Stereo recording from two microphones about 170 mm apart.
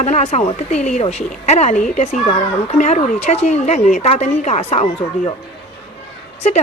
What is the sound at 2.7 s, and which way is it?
Speech, 45° left (ahead or behind).